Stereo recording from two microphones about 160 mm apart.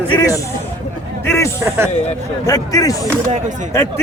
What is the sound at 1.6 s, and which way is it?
Speech, 15° right (ahead or behind).